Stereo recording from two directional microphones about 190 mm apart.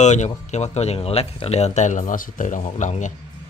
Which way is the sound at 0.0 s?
40° left (ahead or behind).